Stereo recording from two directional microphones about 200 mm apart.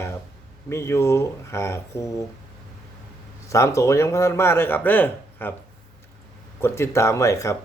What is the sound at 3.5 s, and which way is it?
Speech, 15° left (ahead or behind).